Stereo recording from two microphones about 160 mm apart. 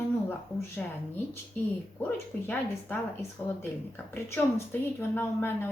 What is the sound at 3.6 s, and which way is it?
A woman's voice, 10° left (ahead or behind).